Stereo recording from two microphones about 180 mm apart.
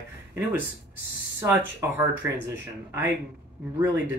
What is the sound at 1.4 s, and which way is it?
Speech, 10° right (ahead or behind).